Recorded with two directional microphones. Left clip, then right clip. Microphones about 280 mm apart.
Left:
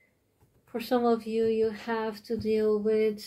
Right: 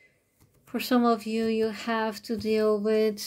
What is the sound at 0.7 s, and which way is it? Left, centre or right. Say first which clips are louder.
Speech: right 2 dB; right.